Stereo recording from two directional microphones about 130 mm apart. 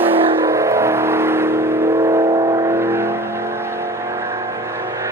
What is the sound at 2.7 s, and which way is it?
Vehicle, 20° right (ahead or behind).